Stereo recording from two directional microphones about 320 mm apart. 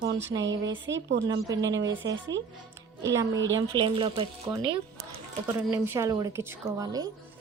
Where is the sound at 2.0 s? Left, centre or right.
Right.